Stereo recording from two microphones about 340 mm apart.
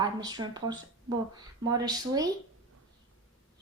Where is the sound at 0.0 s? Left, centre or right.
Centre.